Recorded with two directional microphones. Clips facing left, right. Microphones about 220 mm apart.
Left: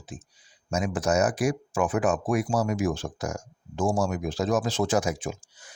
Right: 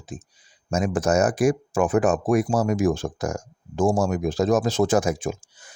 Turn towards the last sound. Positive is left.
turn(degrees=-50)  # may be behind; listen again after turning